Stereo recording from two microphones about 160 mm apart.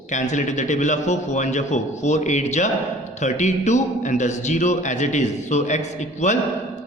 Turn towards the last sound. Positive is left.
turn(degrees=50)  # may be behind; listen again after turning